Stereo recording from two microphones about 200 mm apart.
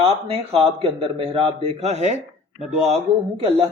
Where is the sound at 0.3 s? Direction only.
30° right (ahead or behind).